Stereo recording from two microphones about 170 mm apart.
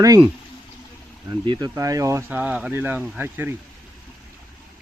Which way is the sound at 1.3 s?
25° right (ahead or behind).